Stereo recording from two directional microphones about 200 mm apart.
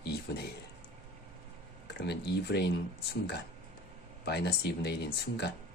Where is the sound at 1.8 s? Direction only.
60° left (ahead or behind).